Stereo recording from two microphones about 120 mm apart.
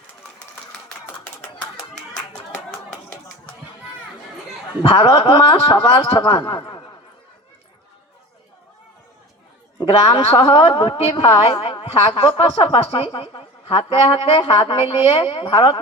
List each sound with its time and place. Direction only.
4.8 s a woman's voice: 45° left (ahead or behind)
10.1 s a woman's voice: 40° left (ahead or behind)